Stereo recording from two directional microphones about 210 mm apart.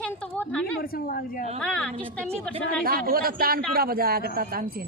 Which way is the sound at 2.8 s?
45° right (ahead or behind).